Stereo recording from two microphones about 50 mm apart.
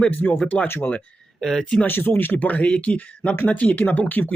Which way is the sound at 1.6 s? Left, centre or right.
Left.